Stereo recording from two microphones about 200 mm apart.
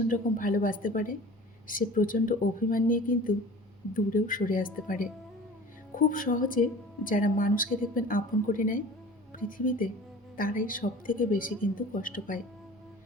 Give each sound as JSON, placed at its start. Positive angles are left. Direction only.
{"t": 0.1, "sound": "a woman's voice", "side_deg": 40}